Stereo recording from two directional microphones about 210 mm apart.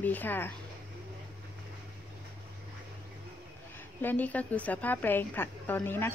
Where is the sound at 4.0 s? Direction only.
10° left (ahead or behind).